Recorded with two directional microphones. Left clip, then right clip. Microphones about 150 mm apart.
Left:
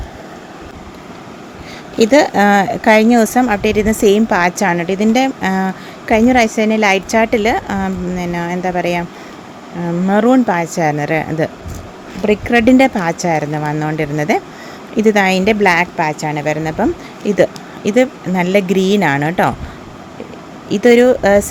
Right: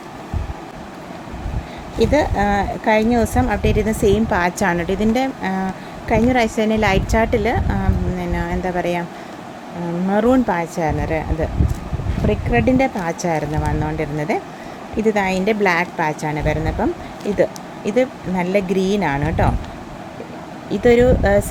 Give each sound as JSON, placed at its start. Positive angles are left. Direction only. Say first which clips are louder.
{"t": 2.0, "sound": "speech", "louder": "left 6 dB", "side_deg": 50}
{"t": 10.1, "sound": "a woman's voice", "louder": "left 4 dB", "side_deg": 35}
{"t": 20.7, "sound": "a woman's voice", "louder": "left 4 dB", "side_deg": 45}